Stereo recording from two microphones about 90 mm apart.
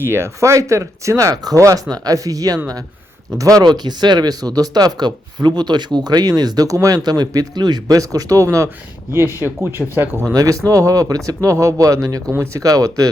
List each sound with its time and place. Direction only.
0.0 s speech: 30° right (ahead or behind)
10.3 s speech: 40° right (ahead or behind)